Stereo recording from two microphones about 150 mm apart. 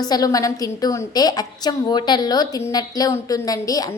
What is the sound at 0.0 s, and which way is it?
A woman's voice, 25° left (ahead or behind).